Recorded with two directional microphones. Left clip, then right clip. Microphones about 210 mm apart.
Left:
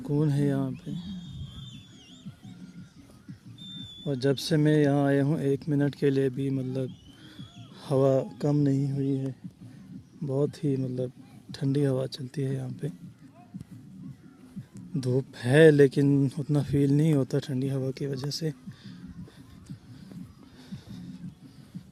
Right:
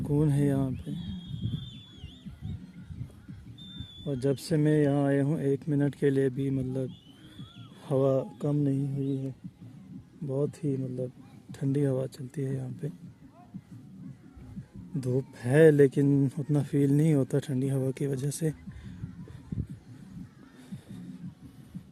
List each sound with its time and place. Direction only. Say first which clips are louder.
0.0 s speech: even; 5° right (ahead or behind)
4.0 s speech: left 3 dB; 10° left (ahead or behind)
7.9 s speech: left 2 dB; 10° left (ahead or behind)
15.0 s speech: left 2 dB; 10° left (ahead or behind); by 18.6 s 10° right (ahead or behind)